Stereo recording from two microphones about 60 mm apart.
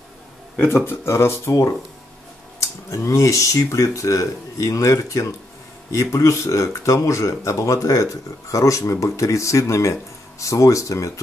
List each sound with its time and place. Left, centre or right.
0.6 s speech: left
2.9 s speech: left